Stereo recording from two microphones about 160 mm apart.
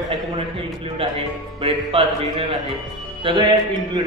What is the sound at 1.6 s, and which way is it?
Music, 35° right (ahead or behind).